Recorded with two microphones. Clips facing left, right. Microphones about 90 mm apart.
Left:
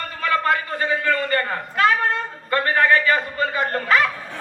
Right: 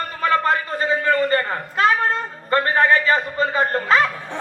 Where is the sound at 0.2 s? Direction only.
30° right (ahead or behind).